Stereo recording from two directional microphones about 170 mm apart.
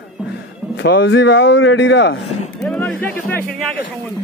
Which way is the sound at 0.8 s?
90° left.